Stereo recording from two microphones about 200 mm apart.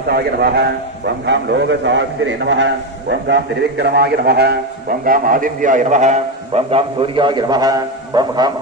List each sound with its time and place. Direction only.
0.1 s a man's voice: 55° right (ahead or behind); by 8.5 s 20° right (ahead or behind)